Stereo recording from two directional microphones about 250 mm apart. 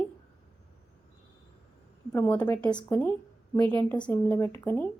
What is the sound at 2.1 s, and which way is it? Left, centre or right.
A woman's voice, centre.